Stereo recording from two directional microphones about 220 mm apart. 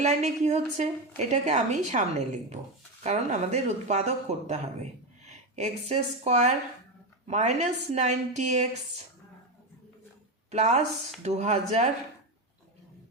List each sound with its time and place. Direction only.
0.0 s speech: 30° right (ahead or behind)
10.5 s speech: 30° right (ahead or behind)